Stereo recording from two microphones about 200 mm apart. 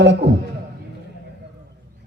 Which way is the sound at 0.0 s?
60° right (ahead or behind).